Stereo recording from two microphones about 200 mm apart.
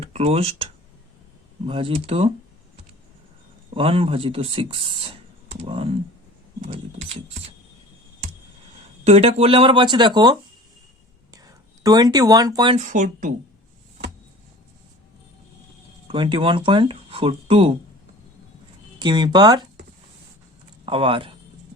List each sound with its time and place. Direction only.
0.0 s speech: 30° right (ahead or behind)
3.8 s speech: 25° right (ahead or behind)
6.6 s a sound: 30° right (ahead or behind)
9.0 s speech: 30° right (ahead or behind)
11.3 s speech: 20° right (ahead or behind)
12.8 s a sound: 40° right (ahead or behind)
16.0 s speech: 25° right (ahead or behind)
18.9 s speech: 20° right (ahead or behind)
20.8 s speech: 25° right (ahead or behind)